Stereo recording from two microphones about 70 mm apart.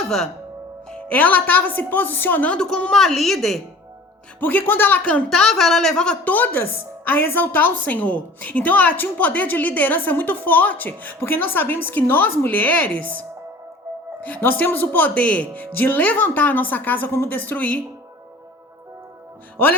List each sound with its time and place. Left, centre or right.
0.0 s speech: centre
0.9 s a woman's voice: centre
2.6 s a woman's voice: centre
4.4 s a woman's voice: left
5.3 s speech: centre
6.2 s a woman's voice: left
19.6 s music: left